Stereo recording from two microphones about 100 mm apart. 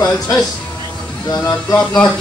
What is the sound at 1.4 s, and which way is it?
Speech, 35° left (ahead or behind).